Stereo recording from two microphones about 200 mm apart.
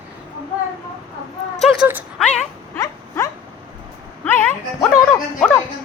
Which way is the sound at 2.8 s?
15° left (ahead or behind).